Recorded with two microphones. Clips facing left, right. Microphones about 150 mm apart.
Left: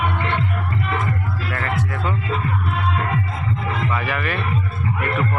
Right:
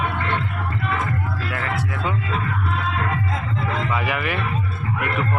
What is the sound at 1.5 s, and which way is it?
Music, 10° right (ahead or behind).